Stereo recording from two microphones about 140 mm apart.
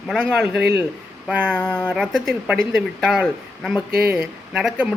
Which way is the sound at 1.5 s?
5° left (ahead or behind).